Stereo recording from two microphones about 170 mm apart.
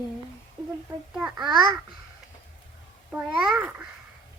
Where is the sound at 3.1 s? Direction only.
10° right (ahead or behind).